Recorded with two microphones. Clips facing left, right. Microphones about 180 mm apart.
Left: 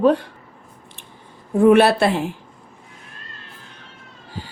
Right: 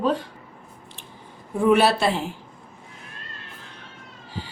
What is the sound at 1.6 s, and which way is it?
Speech, 55° left (ahead or behind).